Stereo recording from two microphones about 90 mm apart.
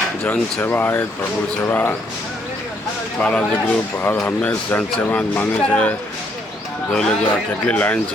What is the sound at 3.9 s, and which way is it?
Speech, 25° left (ahead or behind).